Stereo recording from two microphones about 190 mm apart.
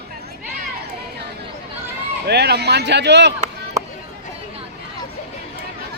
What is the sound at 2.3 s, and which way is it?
Speech, 60° right (ahead or behind).